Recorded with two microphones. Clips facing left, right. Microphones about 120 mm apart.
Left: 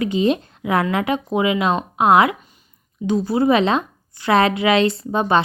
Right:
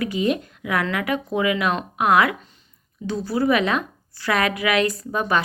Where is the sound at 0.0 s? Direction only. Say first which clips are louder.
Left 4 dB; 25° left (ahead or behind).